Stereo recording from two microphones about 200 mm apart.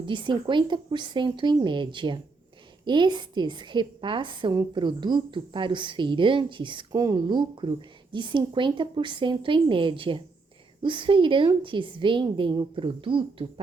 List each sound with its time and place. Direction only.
0.0 s a woman's voice: 25° right (ahead or behind)